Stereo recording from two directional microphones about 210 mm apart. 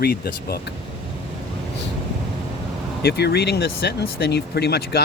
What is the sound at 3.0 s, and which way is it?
Speech, 50° left (ahead or behind).